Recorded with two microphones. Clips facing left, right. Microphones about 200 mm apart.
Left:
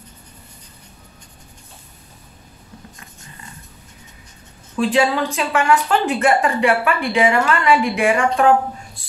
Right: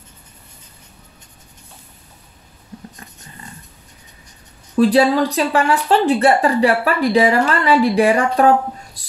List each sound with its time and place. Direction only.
4.7 s speech: 40° right (ahead or behind)
9.0 s music: 40° right (ahead or behind)